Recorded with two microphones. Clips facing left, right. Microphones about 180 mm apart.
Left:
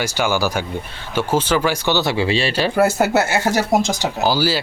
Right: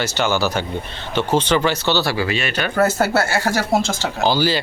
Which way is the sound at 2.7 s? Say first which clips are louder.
Even; 15° left (ahead or behind).